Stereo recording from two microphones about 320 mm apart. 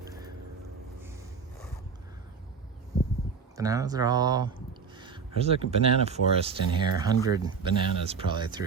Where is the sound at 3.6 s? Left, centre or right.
Centre.